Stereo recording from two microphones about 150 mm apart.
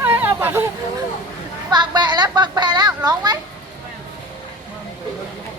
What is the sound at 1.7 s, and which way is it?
A woman's voice, 30° right (ahead or behind).